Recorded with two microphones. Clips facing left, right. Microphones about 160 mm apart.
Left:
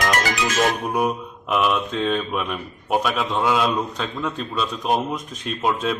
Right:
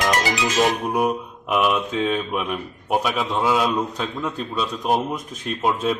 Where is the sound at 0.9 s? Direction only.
5° right (ahead or behind).